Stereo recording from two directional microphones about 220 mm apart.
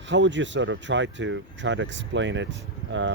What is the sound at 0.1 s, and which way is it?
Speech, 55° right (ahead or behind).